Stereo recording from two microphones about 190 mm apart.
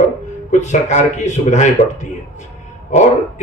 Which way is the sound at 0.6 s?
40° left (ahead or behind).